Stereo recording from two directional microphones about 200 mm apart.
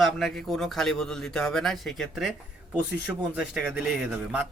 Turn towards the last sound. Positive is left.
turn(degrees=-5)  # may be behind; listen again after turning